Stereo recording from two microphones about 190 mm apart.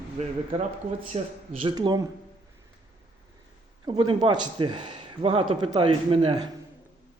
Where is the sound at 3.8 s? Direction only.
25° right (ahead or behind).